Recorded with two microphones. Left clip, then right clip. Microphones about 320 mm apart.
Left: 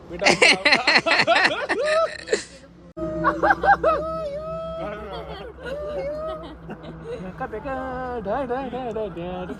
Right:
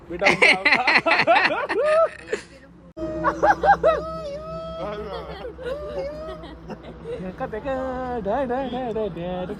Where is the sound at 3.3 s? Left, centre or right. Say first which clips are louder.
Even; right.